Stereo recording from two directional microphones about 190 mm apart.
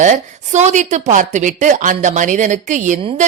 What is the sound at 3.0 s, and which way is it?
Speech, 30° right (ahead or behind).